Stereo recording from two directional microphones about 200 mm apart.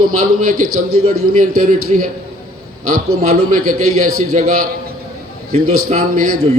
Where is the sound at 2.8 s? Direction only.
90° right.